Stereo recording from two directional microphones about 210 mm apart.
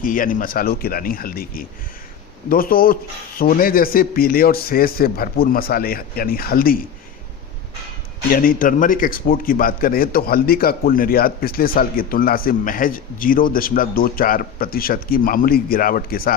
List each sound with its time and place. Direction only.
0.0 s a man's voice: 40° left (ahead or behind)
8.3 s a man's voice: 40° left (ahead or behind)